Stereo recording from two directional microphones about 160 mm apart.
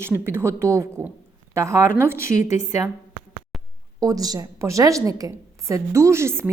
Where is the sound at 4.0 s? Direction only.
25° right (ahead or behind).